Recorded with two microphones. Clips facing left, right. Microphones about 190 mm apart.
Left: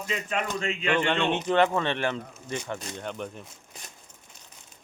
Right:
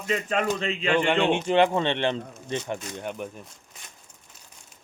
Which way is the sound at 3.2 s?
5° right (ahead or behind).